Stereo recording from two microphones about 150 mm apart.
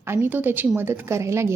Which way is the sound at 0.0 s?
15° right (ahead or behind).